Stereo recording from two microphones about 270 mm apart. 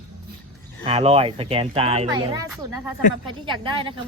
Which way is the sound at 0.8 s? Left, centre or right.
Right.